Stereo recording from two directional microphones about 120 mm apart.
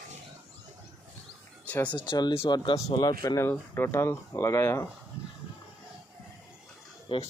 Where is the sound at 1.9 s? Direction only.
40° left (ahead or behind); by 4.8 s 25° left (ahead or behind).